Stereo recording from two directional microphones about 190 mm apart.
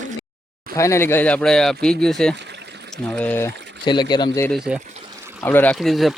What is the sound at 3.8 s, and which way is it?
Speech, 25° left (ahead or behind).